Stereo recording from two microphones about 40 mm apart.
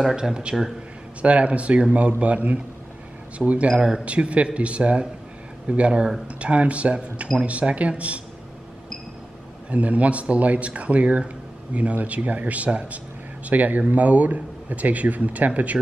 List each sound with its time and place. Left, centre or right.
0.1 s a man's voice: right
9.7 s a man's voice: right